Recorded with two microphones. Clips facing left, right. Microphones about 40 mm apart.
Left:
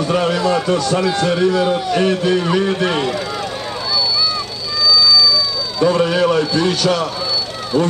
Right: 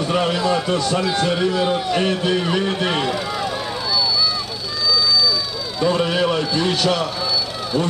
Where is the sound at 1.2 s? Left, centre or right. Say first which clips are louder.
Left 4 dB; centre.